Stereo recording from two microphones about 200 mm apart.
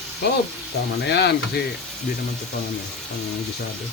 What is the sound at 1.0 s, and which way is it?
Sizzle, 55° left (ahead or behind).